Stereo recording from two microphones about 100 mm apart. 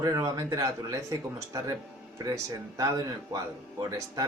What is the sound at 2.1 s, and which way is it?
Speech, 35° right (ahead or behind).